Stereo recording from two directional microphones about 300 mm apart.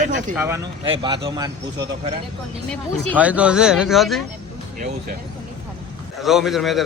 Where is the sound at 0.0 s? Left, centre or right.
Right.